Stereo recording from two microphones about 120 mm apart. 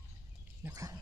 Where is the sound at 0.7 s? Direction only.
30° right (ahead or behind).